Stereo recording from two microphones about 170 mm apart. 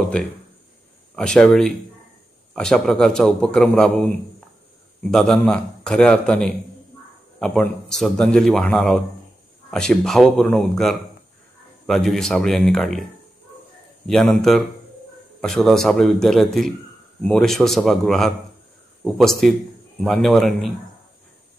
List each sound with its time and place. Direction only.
0.1 s a man's voice: 5° left (ahead or behind)
14.0 s a man's voice: centre (ahead or behind)